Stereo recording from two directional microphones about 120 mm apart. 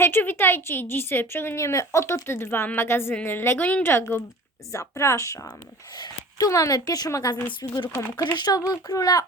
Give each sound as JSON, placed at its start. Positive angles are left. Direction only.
{"t": 0.0, "sound": "a woman's voice", "side_deg": 15}